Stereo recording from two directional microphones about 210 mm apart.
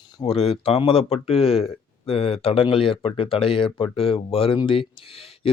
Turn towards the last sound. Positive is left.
turn(degrees=25)  # may be behind; listen again after turning